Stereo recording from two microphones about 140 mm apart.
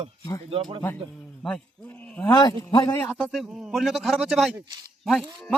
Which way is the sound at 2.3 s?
30° left (ahead or behind).